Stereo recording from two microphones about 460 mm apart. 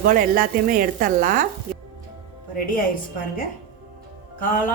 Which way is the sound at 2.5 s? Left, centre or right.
Centre.